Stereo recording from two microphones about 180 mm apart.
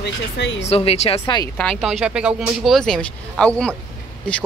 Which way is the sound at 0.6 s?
35° left (ahead or behind).